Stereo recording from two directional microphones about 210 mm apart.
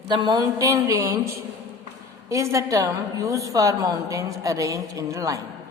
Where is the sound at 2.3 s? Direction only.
15° right (ahead or behind).